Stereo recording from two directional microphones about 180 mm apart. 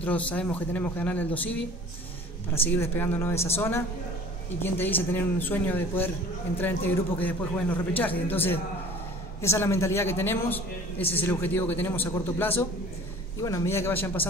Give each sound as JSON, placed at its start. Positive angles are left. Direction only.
{"t": 0.0, "sound": "a man's voice", "side_deg": 10}
{"t": 11.0, "sound": "a man's voice", "side_deg": 30}
{"t": 11.2, "sound": "a man's voice", "side_deg": 10}